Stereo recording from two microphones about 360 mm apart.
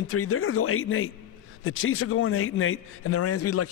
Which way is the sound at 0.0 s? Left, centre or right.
Left.